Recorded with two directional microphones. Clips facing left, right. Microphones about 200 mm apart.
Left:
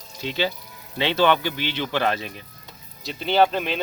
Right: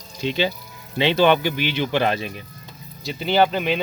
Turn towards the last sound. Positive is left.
turn(degrees=0)  # may be behind; listen again after turning